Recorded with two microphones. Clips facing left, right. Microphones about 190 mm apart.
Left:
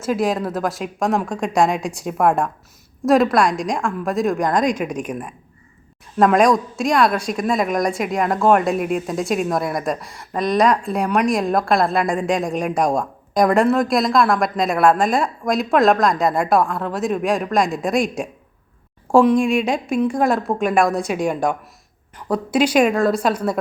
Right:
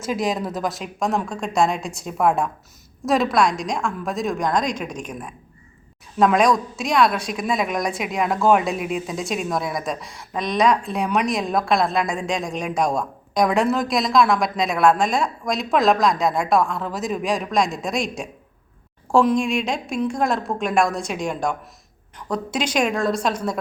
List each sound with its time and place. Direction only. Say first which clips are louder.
0.0 s a woman's voice: left 3 dB; 5° left (ahead or behind)
3.1 s speech: left 4 dB; centre (ahead or behind)
19.1 s speech: left 4 dB; centre (ahead or behind)
20.8 s a woman's voice: left 4 dB; 60° left (ahead or behind)
22.3 s speech: left 7 dB; 5° left (ahead or behind)